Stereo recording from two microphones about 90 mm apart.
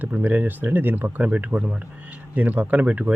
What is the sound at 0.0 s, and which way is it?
Speech, 20° right (ahead or behind).